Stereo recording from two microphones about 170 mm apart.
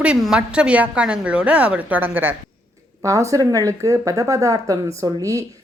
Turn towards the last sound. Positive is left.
turn(degrees=-20)  # may be behind; listen again after turning